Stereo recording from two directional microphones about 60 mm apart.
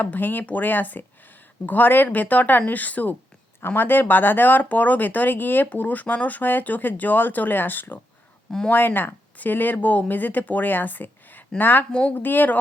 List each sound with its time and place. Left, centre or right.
0.0 s speech: left
11.9 s speech: centre
12.1 s speech: left